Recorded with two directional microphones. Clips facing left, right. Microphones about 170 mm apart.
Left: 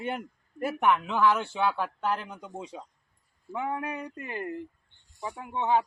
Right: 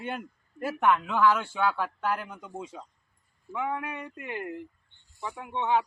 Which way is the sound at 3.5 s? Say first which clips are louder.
Even; 35° left (ahead or behind).